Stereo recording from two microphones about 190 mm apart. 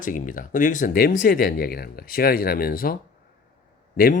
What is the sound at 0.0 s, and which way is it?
Speech, 45° left (ahead or behind).